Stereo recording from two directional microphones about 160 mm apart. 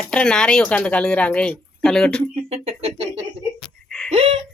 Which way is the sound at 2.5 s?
40° right (ahead or behind).